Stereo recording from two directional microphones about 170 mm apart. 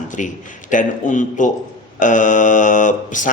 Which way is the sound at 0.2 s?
45° left (ahead or behind).